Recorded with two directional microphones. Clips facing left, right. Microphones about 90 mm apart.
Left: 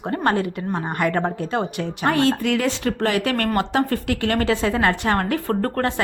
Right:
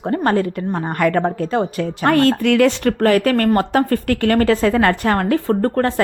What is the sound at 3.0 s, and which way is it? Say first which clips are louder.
Speech: right 8 dB; 45° right (ahead or behind).